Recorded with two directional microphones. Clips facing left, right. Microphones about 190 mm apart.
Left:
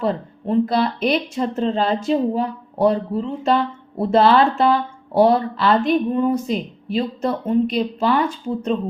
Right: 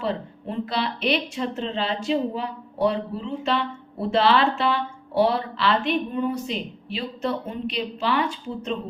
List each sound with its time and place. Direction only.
0.0 s speech: 45° left (ahead or behind)